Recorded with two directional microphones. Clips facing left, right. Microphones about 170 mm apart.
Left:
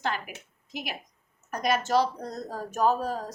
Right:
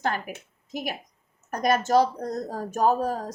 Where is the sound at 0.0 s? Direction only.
45° right (ahead or behind).